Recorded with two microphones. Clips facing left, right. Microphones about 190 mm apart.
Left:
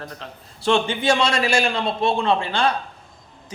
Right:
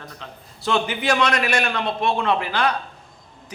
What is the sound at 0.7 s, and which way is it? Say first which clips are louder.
A man's voice: left 2 dB; 25° left (ahead or behind).